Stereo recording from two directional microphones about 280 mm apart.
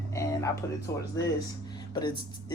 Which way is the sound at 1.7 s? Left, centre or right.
Centre.